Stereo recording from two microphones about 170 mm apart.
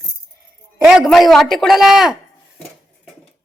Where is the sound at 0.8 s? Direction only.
Centre (ahead or behind).